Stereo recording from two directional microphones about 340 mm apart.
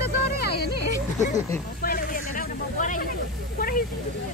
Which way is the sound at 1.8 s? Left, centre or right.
Left.